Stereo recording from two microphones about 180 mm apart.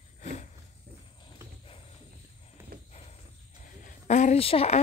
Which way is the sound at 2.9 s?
35° left (ahead or behind).